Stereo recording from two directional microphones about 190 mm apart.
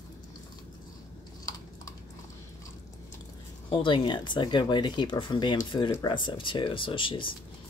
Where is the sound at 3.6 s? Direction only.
25° left (ahead or behind).